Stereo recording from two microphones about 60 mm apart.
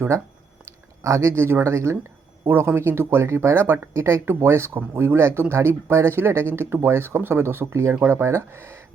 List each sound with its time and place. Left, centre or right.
1.0 s speech: right